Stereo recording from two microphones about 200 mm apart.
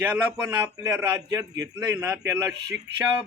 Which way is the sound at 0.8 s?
15° right (ahead or behind).